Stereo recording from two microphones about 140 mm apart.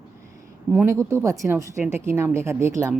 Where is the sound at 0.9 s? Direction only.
20° right (ahead or behind).